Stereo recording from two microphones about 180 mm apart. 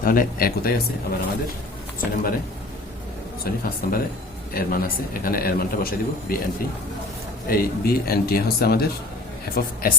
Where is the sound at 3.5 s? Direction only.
60° left (ahead or behind).